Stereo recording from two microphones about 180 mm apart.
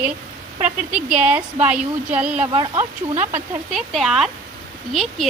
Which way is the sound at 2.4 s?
25° right (ahead or behind).